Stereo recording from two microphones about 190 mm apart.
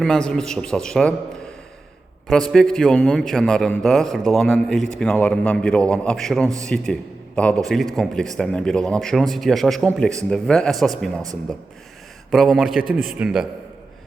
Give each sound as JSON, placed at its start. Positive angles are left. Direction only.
{"t": 0.0, "sound": "a man's voice", "side_deg": 5}
{"t": 12.3, "sound": "a man's voice", "side_deg": 0}